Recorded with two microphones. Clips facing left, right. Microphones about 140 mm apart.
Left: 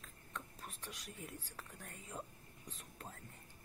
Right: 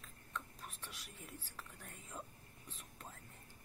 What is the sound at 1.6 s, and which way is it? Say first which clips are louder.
Speech: left 1 dB; 40° left (ahead or behind).